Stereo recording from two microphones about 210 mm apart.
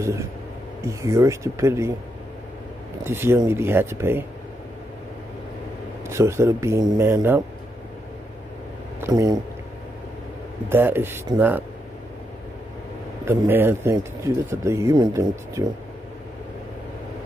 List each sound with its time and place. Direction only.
0.8 s speech: 15° right (ahead or behind)
3.0 s speech: 10° right (ahead or behind)
6.0 s speech: 15° right (ahead or behind)
9.0 s speech: 15° right (ahead or behind)
10.7 s speech: 10° right (ahead or behind)
13.2 s speech: 10° right (ahead or behind)